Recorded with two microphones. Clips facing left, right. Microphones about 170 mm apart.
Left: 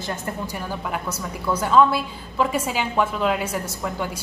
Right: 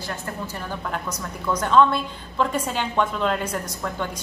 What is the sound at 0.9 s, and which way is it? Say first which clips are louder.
A woman's voice: left 2 dB; 10° left (ahead or behind).